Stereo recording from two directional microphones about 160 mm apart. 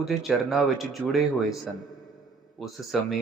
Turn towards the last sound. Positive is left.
turn(degrees=0)  # may be behind; listen again after turning